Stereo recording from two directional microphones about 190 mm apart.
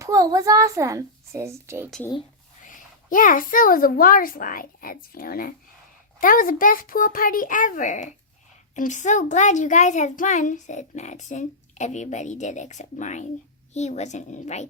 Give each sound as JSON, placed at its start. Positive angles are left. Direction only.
{"t": 0.0, "sound": "a child's voice", "side_deg": -20}
{"t": 2.6, "sound": "a woman's voice", "side_deg": 45}